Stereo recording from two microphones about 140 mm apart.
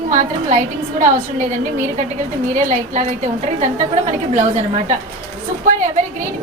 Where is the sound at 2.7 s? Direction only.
60° right (ahead or behind).